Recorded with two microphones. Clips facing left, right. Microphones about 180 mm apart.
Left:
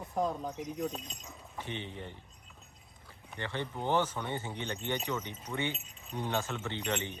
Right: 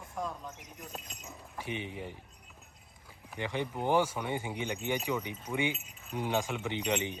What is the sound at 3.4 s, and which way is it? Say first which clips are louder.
Speech: right 3 dB; 15° right (ahead or behind).